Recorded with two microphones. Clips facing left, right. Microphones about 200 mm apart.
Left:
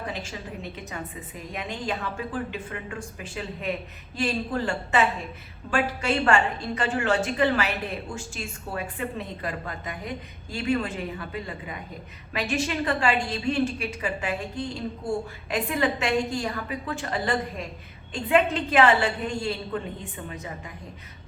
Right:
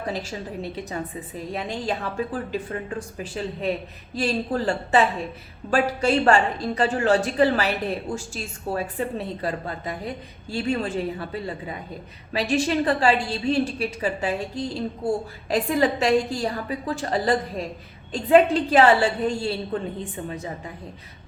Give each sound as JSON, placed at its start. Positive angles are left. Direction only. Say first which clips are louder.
{"t": 0.1, "sound": "a woman's voice", "louder": "right 5 dB", "side_deg": -35}